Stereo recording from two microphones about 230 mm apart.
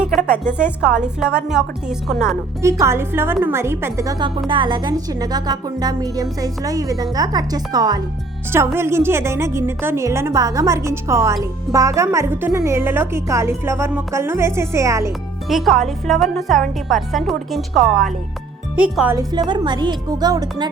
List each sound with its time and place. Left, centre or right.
0.1 s music: centre
0.5 s a woman's voice: centre
2.6 s a woman's voice: centre
15.4 s a woman's voice: centre